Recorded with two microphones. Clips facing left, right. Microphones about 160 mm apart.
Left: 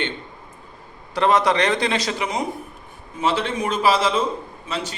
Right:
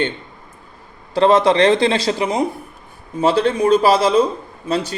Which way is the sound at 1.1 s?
30° right (ahead or behind).